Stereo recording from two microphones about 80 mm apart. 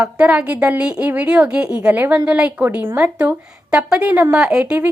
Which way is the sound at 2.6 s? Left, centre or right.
Right.